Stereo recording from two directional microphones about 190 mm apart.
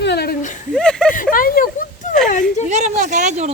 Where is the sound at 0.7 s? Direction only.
5° left (ahead or behind).